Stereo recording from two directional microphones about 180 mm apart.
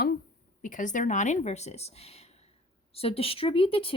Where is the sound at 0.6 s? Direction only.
45° left (ahead or behind).